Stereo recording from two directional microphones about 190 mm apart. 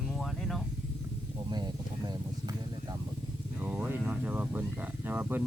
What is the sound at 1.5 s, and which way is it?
Speech, 20° right (ahead or behind).